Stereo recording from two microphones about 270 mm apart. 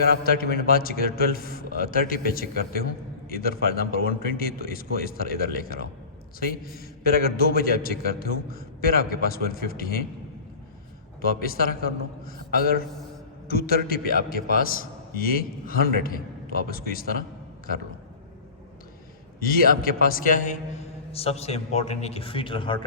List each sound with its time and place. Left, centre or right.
0.0 s a man's voice: left
11.2 s a man's voice: left
19.4 s a man's voice: left